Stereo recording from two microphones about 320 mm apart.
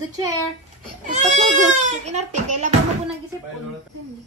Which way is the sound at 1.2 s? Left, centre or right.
Right.